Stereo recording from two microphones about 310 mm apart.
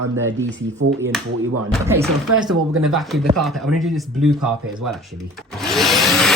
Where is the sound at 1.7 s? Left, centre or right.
Centre.